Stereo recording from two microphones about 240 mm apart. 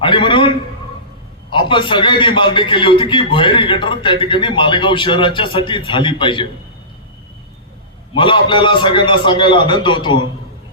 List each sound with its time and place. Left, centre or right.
0.0 s a sound: centre
1.5 s a man's voice: centre
8.1 s a man's voice: left